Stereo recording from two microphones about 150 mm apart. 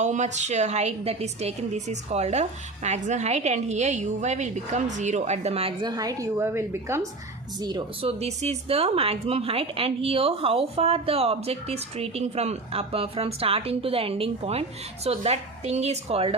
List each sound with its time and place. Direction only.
0.0 s a woman's voice: 50° right (ahead or behind)
5.8 s a woman's voice: 25° right (ahead or behind)
8.0 s a woman's voice: 45° right (ahead or behind)